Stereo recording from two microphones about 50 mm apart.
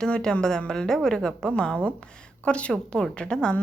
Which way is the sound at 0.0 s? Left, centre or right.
Centre.